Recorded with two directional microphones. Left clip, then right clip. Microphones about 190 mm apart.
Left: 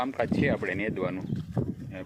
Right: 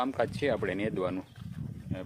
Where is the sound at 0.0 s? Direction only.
15° right (ahead or behind).